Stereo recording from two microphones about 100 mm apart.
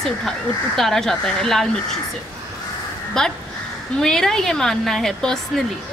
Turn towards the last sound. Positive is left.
turn(degrees=5)  # may be behind; listen again after turning